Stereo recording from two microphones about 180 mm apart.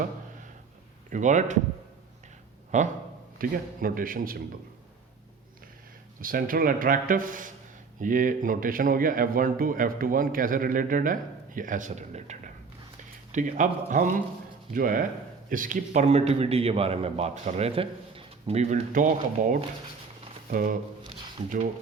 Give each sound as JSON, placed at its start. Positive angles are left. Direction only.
{"t": 1.1, "sound": "a man's voice", "side_deg": -40}
{"t": 2.7, "sound": "a man's voice", "side_deg": -40}
{"t": 3.3, "sound": "a man's voice", "side_deg": -50}
{"t": 6.1, "sound": "a man's voice", "side_deg": -50}